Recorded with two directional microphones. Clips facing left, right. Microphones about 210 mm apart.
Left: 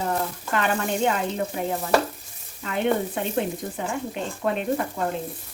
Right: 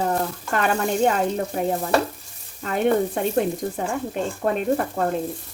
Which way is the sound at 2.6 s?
45° right (ahead or behind).